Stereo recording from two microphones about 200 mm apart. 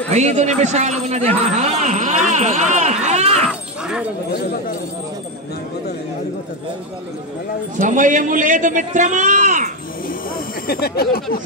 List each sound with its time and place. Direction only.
0.1 s a man's voice: 35° right (ahead or behind)
3.4 s a sound: 5° right (ahead or behind)
7.8 s a man's voice: 40° right (ahead or behind)
10.0 s snake: 45° left (ahead or behind)